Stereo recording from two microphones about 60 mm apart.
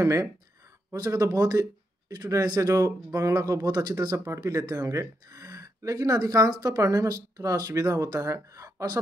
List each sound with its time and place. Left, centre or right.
0.0 s speech: right
0.9 s speech: right